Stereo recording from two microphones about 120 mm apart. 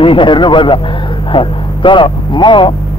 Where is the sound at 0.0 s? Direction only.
45° left (ahead or behind).